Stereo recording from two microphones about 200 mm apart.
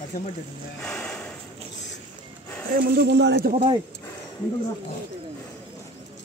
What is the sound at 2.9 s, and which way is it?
Speech, 55° right (ahead or behind).